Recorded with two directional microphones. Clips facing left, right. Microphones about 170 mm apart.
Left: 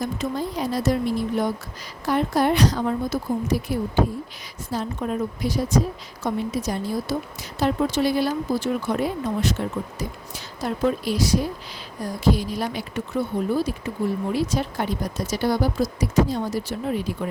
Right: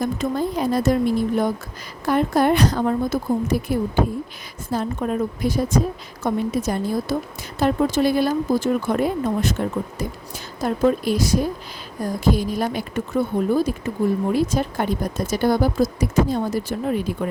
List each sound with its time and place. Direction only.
0.0 s speech: 55° right (ahead or behind)